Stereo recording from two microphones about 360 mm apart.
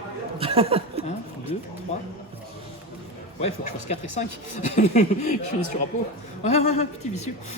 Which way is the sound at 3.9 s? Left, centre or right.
Centre.